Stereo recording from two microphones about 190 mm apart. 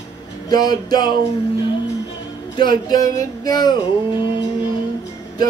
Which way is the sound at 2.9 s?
20° left (ahead or behind).